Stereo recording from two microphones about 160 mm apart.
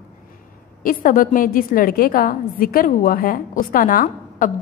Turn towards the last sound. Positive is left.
turn(degrees=60)  # may be behind; listen again after turning